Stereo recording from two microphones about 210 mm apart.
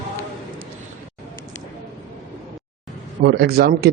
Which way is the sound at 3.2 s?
50° right (ahead or behind).